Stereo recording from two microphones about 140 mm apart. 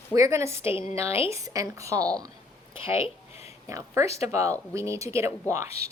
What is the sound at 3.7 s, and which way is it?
Speech, 20° right (ahead or behind).